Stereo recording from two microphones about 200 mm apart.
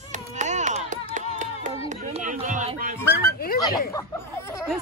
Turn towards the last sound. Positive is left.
turn(degrees=15)  # may be behind; listen again after turning